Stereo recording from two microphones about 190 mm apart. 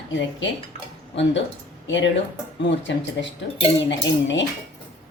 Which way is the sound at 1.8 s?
75° left (ahead or behind).